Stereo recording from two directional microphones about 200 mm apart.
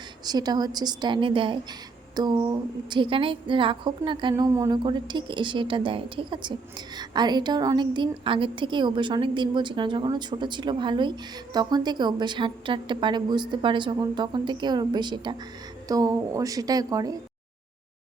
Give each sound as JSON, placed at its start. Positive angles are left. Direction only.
{"t": 0.3, "sound": "a woman's voice", "side_deg": -20}